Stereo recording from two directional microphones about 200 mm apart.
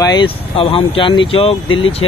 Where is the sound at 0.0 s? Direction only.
20° left (ahead or behind).